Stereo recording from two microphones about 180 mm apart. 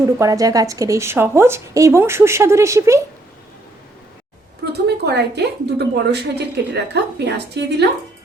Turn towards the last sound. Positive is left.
turn(degrees=-70)  # may be behind; listen again after turning